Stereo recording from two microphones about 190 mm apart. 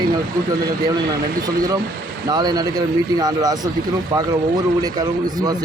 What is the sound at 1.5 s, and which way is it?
Speech, 20° right (ahead or behind).